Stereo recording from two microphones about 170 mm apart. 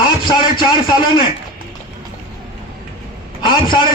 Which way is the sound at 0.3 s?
25° left (ahead or behind).